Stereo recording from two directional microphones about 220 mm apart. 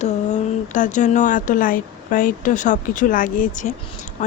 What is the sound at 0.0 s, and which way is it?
Speech, 35° left (ahead or behind).